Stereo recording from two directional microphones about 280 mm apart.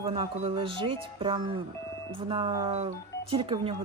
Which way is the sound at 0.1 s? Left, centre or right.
Right.